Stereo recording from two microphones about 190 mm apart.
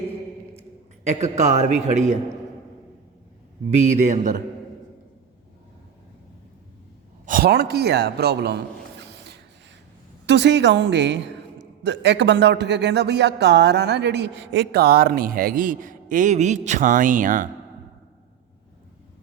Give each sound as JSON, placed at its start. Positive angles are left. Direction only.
{"t": 1.0, "sound": "a man's voice", "side_deg": -35}
{"t": 4.1, "sound": "a man's voice", "side_deg": -40}
{"t": 7.3, "sound": "a man's voice", "side_deg": -50}
{"t": 9.0, "sound": "a sound", "side_deg": -65}
{"t": 10.2, "sound": "a man's voice", "side_deg": -65}